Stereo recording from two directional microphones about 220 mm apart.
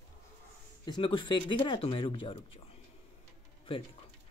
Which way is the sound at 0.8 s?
20° left (ahead or behind).